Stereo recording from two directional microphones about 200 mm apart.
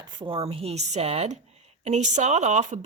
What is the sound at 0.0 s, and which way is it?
A woman's voice, 25° right (ahead or behind).